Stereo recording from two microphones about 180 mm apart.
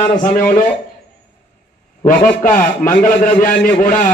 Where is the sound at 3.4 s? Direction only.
10° left (ahead or behind).